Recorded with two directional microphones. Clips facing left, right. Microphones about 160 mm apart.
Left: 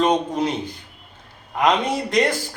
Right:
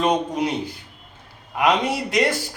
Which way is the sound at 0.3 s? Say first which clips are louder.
Left 1 dB; 10° right (ahead or behind).